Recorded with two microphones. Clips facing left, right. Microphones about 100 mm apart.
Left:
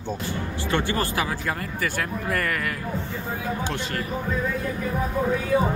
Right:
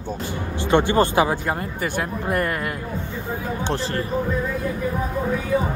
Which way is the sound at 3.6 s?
30° right (ahead or behind).